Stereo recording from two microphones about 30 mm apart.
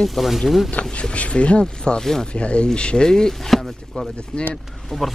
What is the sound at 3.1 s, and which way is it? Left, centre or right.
Speech, left.